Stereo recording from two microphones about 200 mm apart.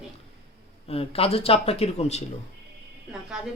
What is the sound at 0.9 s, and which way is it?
Speech, 30° left (ahead or behind).